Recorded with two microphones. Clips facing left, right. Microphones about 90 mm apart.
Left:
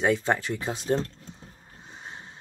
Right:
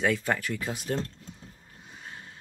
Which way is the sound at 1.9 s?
25° left (ahead or behind).